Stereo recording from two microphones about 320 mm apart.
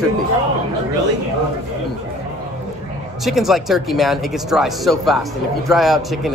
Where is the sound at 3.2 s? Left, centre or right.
Centre.